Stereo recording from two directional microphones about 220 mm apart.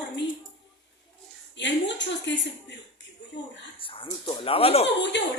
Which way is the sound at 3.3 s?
55° left (ahead or behind).